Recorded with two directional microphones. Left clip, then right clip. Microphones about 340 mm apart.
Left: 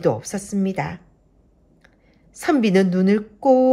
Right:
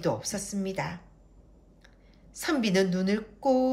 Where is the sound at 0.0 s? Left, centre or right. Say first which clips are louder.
Left 8 dB; centre.